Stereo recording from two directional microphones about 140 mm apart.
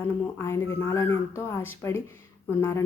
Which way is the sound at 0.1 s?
20° left (ahead or behind).